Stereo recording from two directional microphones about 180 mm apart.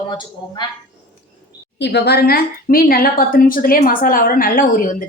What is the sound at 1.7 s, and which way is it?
Speech, 70° left (ahead or behind).